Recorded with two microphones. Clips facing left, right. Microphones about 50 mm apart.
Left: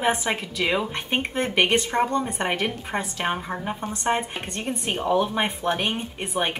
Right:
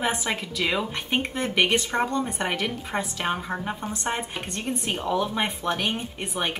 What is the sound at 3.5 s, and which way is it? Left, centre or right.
Speech, centre.